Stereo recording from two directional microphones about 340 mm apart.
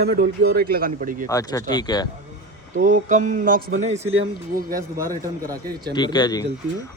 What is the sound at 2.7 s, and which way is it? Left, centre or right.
A man's voice, right.